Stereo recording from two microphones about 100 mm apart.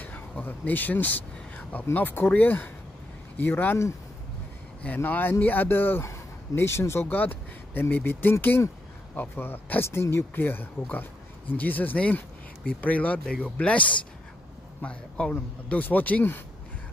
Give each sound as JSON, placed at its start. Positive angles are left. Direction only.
{"t": 0.0, "sound": "speech", "side_deg": 15}